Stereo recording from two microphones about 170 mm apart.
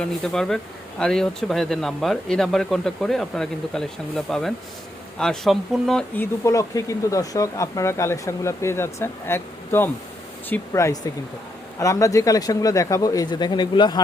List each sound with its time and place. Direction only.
0.0 s speech: 5° left (ahead or behind)
6.4 s speech: 20° left (ahead or behind)